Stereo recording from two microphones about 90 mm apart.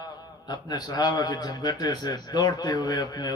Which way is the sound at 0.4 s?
50° left (ahead or behind).